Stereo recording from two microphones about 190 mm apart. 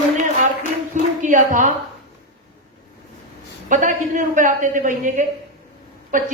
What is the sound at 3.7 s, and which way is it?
A man's voice, 40° right (ahead or behind).